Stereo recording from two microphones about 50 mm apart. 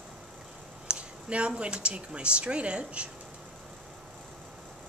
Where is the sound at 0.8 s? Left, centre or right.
Right.